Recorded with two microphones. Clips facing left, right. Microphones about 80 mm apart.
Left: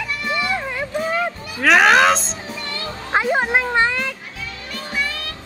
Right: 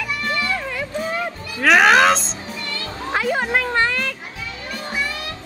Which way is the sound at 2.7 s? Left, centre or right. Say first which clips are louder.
Left 3 dB; left.